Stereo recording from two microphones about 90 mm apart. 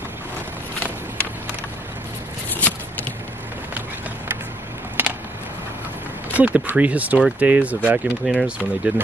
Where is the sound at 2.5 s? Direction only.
20° left (ahead or behind).